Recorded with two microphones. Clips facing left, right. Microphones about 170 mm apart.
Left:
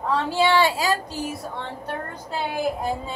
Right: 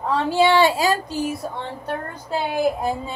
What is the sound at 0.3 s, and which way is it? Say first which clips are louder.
Speech: right 4 dB; 20° right (ahead or behind).